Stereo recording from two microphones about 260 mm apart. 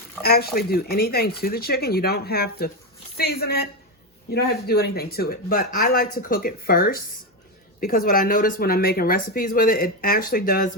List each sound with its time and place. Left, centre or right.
0.2 s speech: left